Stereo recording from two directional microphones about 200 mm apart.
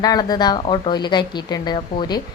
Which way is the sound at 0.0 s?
20° left (ahead or behind).